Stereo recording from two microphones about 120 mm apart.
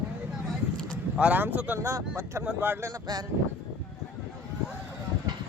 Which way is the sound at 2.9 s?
35° right (ahead or behind).